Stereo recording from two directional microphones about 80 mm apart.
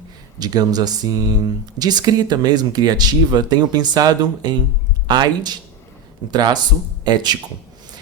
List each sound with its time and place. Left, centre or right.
0.3 s speech: right